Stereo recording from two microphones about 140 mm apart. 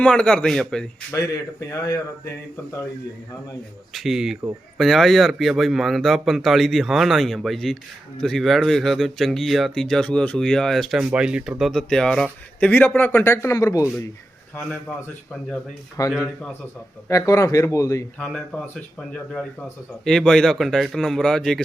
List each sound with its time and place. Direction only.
0.0 s speech: 5° left (ahead or behind)
1.1 s speech: 25° left (ahead or behind)
3.9 s speech: centre (ahead or behind); by 13.9 s 25° left (ahead or behind)
14.5 s a man's voice: 10° left (ahead or behind)
16.0 s speech: 25° left (ahead or behind)
18.2 s speech: 5° left (ahead or behind)